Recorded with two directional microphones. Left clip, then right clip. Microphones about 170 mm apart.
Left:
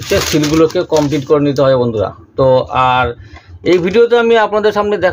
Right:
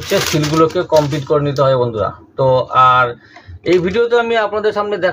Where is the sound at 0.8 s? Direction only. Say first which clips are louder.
Left 1 dB; 50° left (ahead or behind).